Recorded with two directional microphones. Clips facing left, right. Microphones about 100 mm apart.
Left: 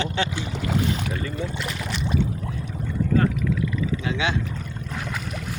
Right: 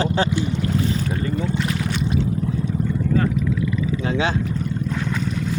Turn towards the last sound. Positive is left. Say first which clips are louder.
# right 4 dB
turn(degrees=-35)  # may be behind; listen again after turning